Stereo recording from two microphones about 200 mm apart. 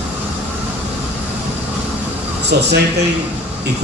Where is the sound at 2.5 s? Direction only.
55° right (ahead or behind).